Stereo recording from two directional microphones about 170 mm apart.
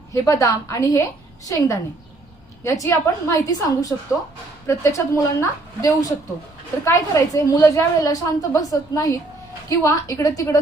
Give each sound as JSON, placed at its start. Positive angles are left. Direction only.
{"t": 0.1, "sound": "a woman's voice", "side_deg": 20}